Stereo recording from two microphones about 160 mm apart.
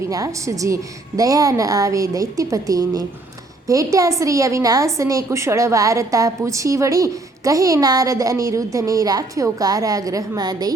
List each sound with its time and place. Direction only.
0.1 s a woman's voice: 20° right (ahead or behind)